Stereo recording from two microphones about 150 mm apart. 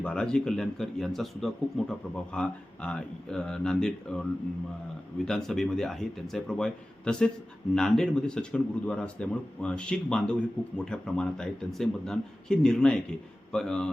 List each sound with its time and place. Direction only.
0.0 s speech: 5° left (ahead or behind)